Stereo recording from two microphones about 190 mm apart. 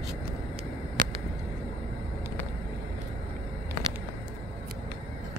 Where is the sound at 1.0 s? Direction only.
45° right (ahead or behind).